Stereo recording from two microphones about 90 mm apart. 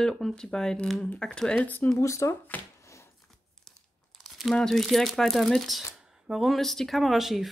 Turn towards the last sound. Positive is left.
turn(degrees=0)  # may be behind; listen again after turning